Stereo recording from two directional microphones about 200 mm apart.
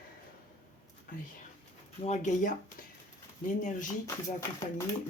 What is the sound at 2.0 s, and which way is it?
Speech, 35° left (ahead or behind).